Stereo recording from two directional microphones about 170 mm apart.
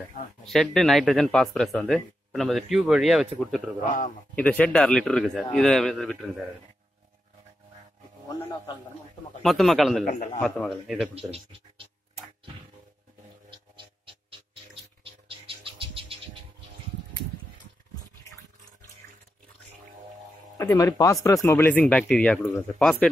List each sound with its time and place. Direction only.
0.5 s speech: centre (ahead or behind)
9.4 s speech: centre (ahead or behind)
10.0 s a man's voice: 45° left (ahead or behind)
10.4 s speech: centre (ahead or behind)
11.1 s speech: 35° right (ahead or behind)
13.5 s a sound: 30° right (ahead or behind)
15.0 s bird: 30° right (ahead or behind)
20.5 s speech: 20° left (ahead or behind)